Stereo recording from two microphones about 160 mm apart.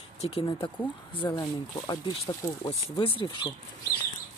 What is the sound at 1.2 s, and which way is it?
Speech, 25° left (ahead or behind).